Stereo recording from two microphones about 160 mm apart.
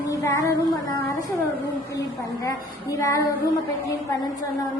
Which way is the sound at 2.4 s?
20° left (ahead or behind).